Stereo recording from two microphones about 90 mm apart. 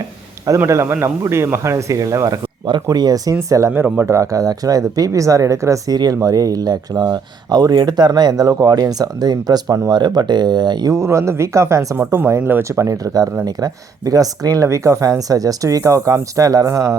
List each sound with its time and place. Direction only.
0.6 s speech: 30° right (ahead or behind); by 3.3 s 45° right (ahead or behind)
3.7 s speech: 15° right (ahead or behind)
3.9 s speech: 35° right (ahead or behind)
9.9 s speech: 55° right (ahead or behind)
10.9 s speech: 30° right (ahead or behind)
11.9 s speech: 25° right (ahead or behind)
12.6 s speech: 35° right (ahead or behind)